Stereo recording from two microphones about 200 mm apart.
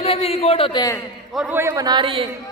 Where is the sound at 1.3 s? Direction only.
5° right (ahead or behind); by 2.3 s 25° right (ahead or behind).